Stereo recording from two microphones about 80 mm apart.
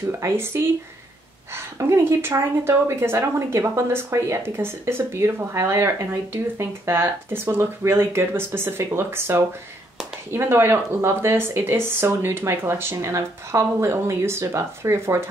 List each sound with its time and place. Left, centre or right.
0.2 s speech: right